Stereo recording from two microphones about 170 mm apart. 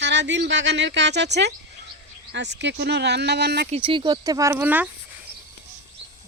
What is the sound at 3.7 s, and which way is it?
Speech, 30° right (ahead or behind).